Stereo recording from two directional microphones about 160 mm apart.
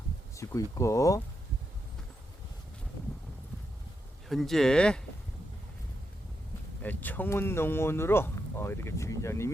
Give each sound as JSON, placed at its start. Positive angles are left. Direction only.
{"t": 0.3, "sound": "speech", "side_deg": 20}
{"t": 4.3, "sound": "speech", "side_deg": 0}
{"t": 6.8, "sound": "speech", "side_deg": 10}